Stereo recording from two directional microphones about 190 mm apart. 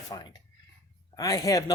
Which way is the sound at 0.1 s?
20° left (ahead or behind).